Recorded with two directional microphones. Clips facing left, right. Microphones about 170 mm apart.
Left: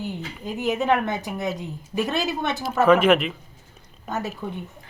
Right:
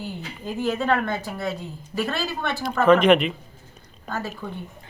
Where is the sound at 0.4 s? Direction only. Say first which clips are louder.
Left 1 dB; 15° left (ahead or behind).